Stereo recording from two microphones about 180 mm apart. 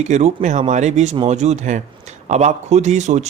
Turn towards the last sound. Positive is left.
turn(degrees=-40)  # may be behind; listen again after turning